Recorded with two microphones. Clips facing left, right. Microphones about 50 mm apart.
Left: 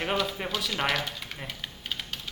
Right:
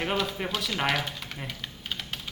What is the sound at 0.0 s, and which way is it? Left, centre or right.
Speech, centre.